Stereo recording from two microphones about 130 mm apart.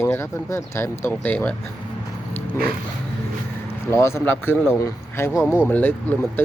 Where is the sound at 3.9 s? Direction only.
20° left (ahead or behind).